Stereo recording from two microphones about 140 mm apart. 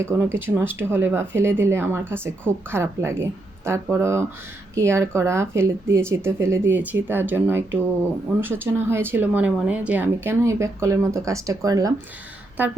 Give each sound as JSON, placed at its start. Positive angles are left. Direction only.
{"t": 0.0, "sound": "speech", "side_deg": -15}